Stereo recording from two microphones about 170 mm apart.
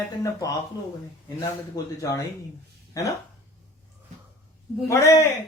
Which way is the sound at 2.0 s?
20° left (ahead or behind).